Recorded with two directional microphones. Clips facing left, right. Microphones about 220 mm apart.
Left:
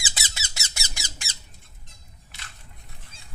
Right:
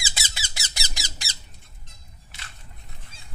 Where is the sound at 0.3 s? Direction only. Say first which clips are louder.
Right 1 dB; 30° right (ahead or behind).